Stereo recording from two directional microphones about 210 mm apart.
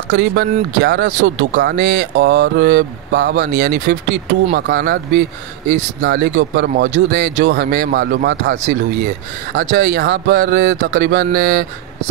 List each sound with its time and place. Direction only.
0.1 s speech: 60° right (ahead or behind)
3.3 s speech: 40° right (ahead or behind)
4.6 s speech: 50° right (ahead or behind)
7.3 s speech: 55° right (ahead or behind)
9.6 s speech: 40° right (ahead or behind)